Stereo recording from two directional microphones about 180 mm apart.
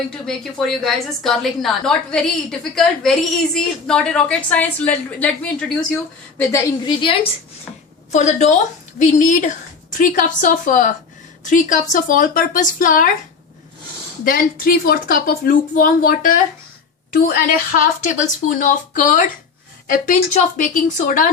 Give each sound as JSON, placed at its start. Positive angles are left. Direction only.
{"t": 0.1, "sound": "a woman's voice", "side_deg": 5}
{"t": 6.5, "sound": "a woman's voice", "side_deg": 25}
{"t": 8.1, "sound": "a woman's voice", "side_deg": 40}
{"t": 14.3, "sound": "a woman's voice", "side_deg": 55}